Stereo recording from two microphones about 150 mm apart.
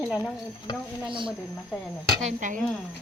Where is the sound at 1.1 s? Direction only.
35° right (ahead or behind).